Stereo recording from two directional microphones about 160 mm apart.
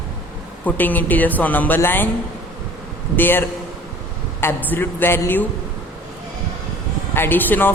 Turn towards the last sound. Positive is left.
turn(degrees=10)  # may be behind; listen again after turning